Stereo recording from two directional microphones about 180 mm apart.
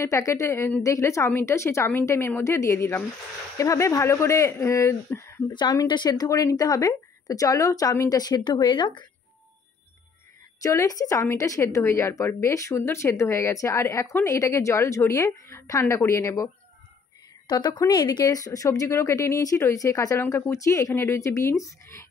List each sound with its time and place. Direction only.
0.0 s a woman's voice: 15° left (ahead or behind)
10.6 s a woman's voice: 20° left (ahead or behind)
17.5 s a woman's voice: 20° left (ahead or behind)